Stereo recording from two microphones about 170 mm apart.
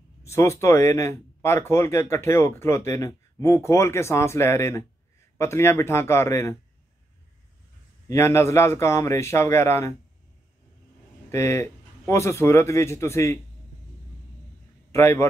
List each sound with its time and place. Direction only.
0.2 s speech: 15° left (ahead or behind)
8.1 s speech: 15° left (ahead or behind)
11.3 s speech: 15° left (ahead or behind)
14.9 s a man's voice: 15° left (ahead or behind)